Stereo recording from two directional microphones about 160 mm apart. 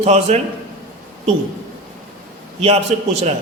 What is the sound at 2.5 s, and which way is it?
Speech, 40° right (ahead or behind).